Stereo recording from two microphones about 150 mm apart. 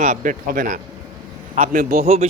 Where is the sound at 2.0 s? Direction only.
45° right (ahead or behind).